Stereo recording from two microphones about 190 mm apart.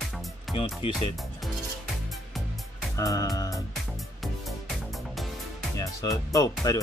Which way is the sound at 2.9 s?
20° left (ahead or behind).